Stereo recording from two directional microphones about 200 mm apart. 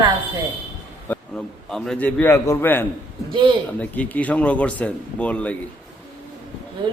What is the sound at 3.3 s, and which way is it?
Speech, 25° right (ahead or behind).